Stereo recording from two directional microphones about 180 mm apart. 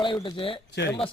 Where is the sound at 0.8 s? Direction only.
70° left (ahead or behind).